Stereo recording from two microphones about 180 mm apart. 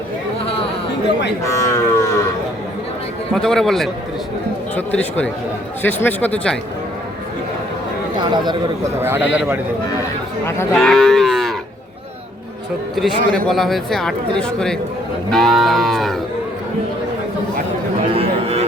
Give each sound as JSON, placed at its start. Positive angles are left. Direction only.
{"t": 1.5, "sound": "speech", "side_deg": 15}
{"t": 3.3, "sound": "speech", "side_deg": 5}
{"t": 8.2, "sound": "speech", "side_deg": -25}
{"t": 9.0, "sound": "a man's voice", "side_deg": -10}
{"t": 10.4, "sound": "speech", "side_deg": 15}
{"t": 10.8, "sound": "moo", "side_deg": 5}
{"t": 13.0, "sound": "speech", "side_deg": 0}
{"t": 18.1, "sound": "a sound", "side_deg": -35}